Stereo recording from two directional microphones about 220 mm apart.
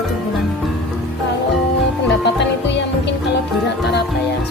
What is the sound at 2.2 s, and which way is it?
Music, 50° left (ahead or behind).